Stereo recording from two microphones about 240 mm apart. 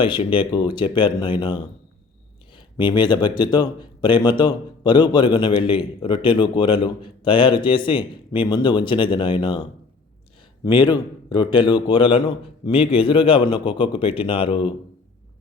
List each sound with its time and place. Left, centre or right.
0.0 s a man's voice: left
2.7 s a man's voice: centre